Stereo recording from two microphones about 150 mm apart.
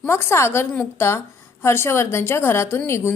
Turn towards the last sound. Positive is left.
turn(degrees=15)  # may be behind; listen again after turning